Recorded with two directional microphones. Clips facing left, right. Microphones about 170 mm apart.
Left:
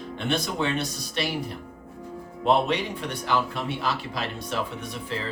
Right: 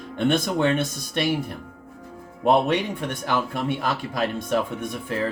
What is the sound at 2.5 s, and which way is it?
Speech, 50° right (ahead or behind).